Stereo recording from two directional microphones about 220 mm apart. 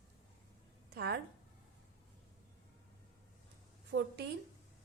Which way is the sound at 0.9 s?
45° right (ahead or behind).